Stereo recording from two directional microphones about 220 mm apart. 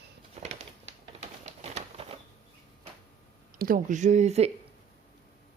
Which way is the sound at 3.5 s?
40° right (ahead or behind).